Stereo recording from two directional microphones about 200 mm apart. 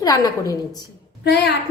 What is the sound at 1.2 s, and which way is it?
Speech, 55° left (ahead or behind).